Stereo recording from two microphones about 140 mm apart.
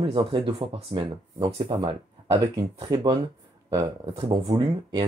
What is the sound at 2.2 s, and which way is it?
Speech, 25° right (ahead or behind).